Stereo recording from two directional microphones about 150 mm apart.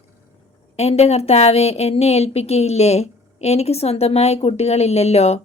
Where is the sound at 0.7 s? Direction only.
45° left (ahead or behind).